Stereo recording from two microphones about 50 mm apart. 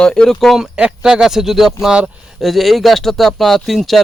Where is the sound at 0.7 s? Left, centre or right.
Centre.